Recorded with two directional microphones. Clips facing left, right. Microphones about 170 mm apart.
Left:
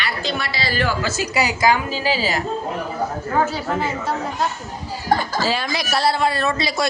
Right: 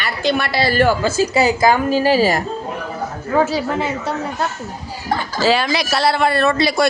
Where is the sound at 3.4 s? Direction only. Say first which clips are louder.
Right 3 dB; 75° right (ahead or behind).